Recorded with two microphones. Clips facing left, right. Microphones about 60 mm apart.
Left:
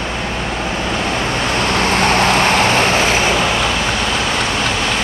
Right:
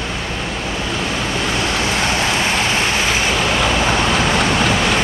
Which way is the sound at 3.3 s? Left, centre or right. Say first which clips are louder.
Left 1 dB; centre.